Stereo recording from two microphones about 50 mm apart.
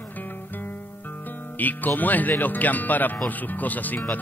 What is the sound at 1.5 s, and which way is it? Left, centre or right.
Speech, left.